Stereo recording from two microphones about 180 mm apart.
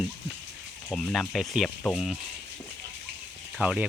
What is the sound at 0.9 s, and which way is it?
Speech, centre (ahead or behind).